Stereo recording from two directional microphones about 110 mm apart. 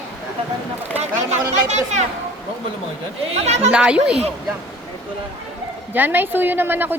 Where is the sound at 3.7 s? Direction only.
10° right (ahead or behind).